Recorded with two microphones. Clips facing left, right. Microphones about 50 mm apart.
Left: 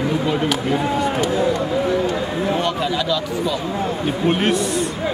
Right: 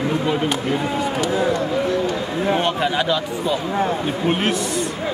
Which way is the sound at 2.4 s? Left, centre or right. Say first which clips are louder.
Right 3 dB; right.